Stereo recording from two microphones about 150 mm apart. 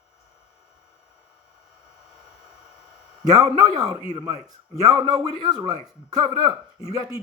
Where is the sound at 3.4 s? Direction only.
25° right (ahead or behind).